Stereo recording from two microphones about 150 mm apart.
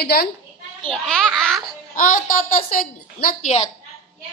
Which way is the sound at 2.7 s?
70° left (ahead or behind).